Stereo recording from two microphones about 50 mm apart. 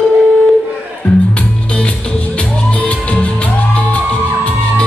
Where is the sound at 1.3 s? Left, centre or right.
Left.